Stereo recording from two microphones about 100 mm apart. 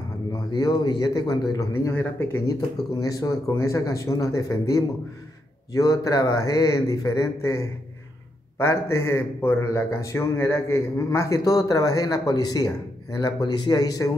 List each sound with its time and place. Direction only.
0.5 s a man's voice: 45° left (ahead or behind)
1.9 s speech: 25° left (ahead or behind)
3.0 s a man's voice: 35° left (ahead or behind)